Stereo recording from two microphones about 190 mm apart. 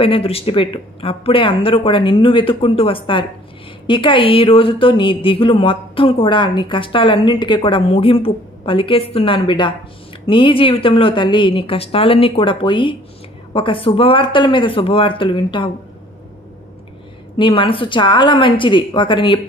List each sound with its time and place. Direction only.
0.0 s a woman's voice: 30° left (ahead or behind)
17.4 s a woman's voice: 25° left (ahead or behind)